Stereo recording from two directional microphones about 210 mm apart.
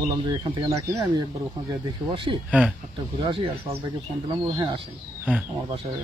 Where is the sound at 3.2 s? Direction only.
25° right (ahead or behind).